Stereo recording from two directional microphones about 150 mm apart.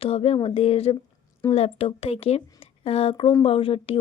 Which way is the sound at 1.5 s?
40° left (ahead or behind).